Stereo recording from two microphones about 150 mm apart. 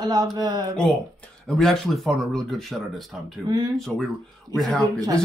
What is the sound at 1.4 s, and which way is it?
Speech, 5° left (ahead or behind).